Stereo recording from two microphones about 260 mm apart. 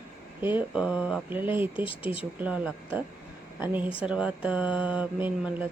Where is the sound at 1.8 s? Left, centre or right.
Left.